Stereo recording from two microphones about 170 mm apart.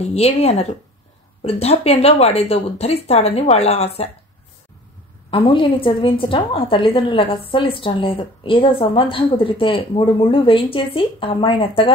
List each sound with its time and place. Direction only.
0.0 s a woman's voice: 35° left (ahead or behind)
5.3 s a woman's voice: 30° left (ahead or behind)